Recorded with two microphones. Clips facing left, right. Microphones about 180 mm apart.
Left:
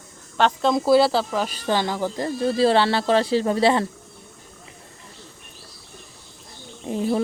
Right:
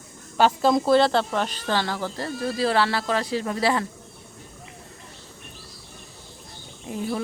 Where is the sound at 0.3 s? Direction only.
5° right (ahead or behind); by 3.8 s 25° left (ahead or behind).